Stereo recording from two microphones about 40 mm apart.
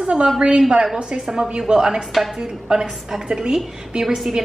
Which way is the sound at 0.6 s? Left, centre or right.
Right.